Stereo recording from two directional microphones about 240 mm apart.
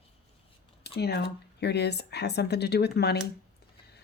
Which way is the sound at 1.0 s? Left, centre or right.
Left.